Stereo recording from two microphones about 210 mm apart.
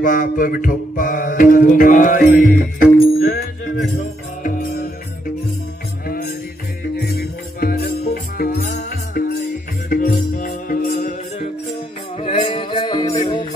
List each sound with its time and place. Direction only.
0.0 s mantra: 40° left (ahead or behind)
4.4 s music: 40° left (ahead or behind)
7.0 s music: 50° left (ahead or behind); by 13.1 s 20° left (ahead or behind)